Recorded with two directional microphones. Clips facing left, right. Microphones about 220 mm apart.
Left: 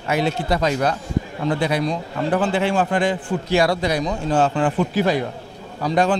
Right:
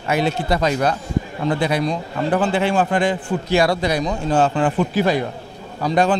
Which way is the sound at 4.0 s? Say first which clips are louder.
Right 1 dB; 25° right (ahead or behind).